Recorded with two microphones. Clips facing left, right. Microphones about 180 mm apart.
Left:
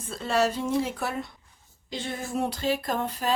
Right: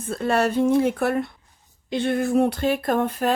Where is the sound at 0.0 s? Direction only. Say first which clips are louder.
Right 4 dB; 55° right (ahead or behind).